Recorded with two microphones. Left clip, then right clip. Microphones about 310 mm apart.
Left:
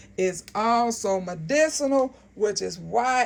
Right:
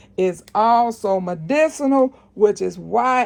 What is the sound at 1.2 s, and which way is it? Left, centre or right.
A woman's voice, centre.